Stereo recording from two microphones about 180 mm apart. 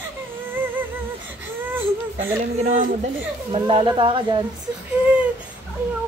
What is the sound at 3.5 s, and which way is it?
Speech, 30° right (ahead or behind).